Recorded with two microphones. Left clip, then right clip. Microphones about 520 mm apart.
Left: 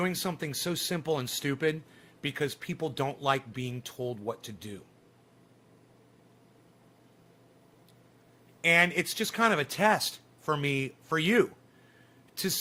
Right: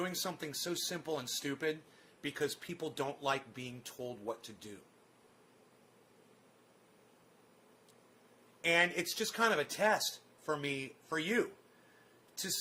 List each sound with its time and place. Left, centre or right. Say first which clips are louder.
0.0 s speech: left 6 dB; left
8.6 s speech: left 7 dB; centre